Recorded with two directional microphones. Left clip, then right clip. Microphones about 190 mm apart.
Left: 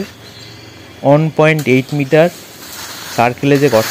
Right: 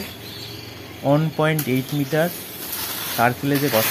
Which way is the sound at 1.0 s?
30° left (ahead or behind).